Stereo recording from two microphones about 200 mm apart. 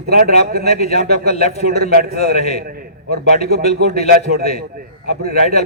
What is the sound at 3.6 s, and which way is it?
Speech, 35° left (ahead or behind).